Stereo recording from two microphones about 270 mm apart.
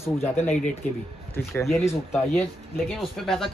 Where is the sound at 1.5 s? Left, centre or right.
Centre.